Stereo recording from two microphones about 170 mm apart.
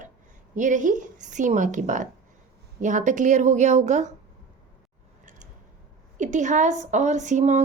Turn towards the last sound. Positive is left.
turn(degrees=-45)  # may be behind; listen again after turning